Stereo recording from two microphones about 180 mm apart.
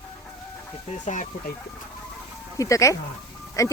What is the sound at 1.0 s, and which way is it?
Speech, 45° left (ahead or behind).